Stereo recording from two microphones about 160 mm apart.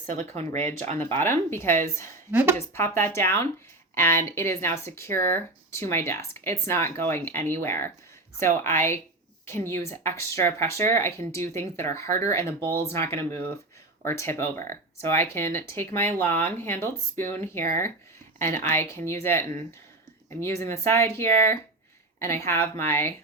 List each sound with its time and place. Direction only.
0.1 s speech: 45° right (ahead or behind)
0.5 s speech: 15° left (ahead or behind)
2.3 s a woman's voice: 10° right (ahead or behind)
2.6 s speech: 15° left (ahead or behind)